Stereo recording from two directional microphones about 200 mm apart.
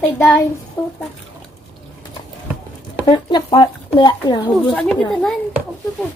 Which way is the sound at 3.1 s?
20° left (ahead or behind).